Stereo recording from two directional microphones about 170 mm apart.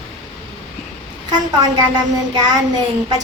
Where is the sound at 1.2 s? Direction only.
25° right (ahead or behind).